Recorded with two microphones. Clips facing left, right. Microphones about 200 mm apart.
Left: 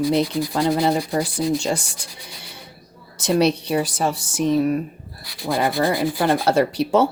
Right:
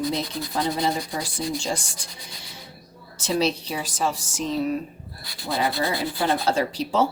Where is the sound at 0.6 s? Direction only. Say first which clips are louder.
Left 5 dB; 70° left (ahead or behind).